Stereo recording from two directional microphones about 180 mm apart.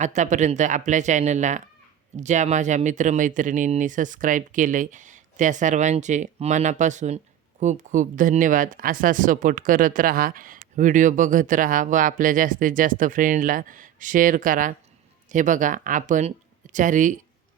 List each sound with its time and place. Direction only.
0.0 s speech: 40° right (ahead or behind)